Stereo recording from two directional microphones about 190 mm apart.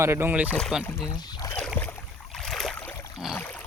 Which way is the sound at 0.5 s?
5° left (ahead or behind).